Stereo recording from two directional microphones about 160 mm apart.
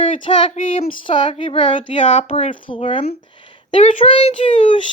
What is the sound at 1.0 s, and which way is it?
Speech, 30° left (ahead or behind).